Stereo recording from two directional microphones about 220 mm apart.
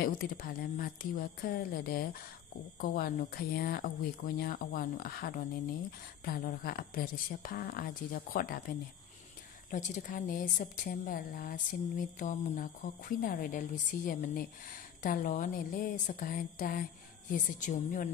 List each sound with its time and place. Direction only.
0.0 s a woman's voice: 40° left (ahead or behind)